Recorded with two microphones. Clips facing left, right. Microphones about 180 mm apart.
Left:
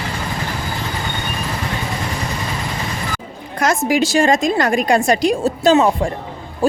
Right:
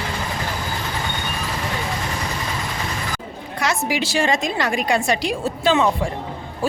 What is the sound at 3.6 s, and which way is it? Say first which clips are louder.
A woman's voice: left 6 dB; 45° left (ahead or behind).